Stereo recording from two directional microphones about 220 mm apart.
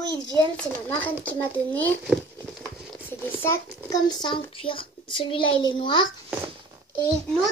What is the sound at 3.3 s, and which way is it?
A child's voice, 10° left (ahead or behind).